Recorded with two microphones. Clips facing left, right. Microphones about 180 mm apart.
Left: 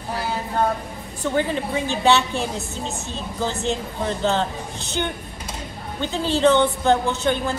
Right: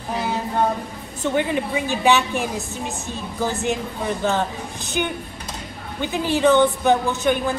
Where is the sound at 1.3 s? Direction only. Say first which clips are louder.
Right 1 dB; 15° right (ahead or behind).